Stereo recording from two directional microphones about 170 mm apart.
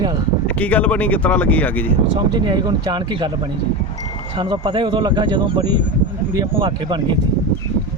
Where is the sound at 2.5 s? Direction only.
25° right (ahead or behind).